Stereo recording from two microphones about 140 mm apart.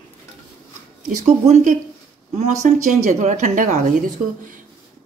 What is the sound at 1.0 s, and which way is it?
A woman's voice, 60° right (ahead or behind).